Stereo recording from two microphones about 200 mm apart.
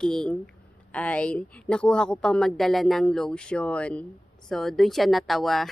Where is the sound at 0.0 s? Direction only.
5° left (ahead or behind).